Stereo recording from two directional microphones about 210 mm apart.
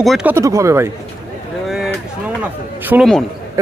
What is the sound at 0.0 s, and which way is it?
Speech, centre (ahead or behind).